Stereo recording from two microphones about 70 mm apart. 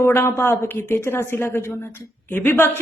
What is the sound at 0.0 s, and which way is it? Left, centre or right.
A woman's voice, left.